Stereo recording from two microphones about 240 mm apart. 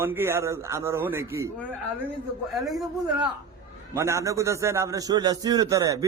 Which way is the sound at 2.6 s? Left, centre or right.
Centre.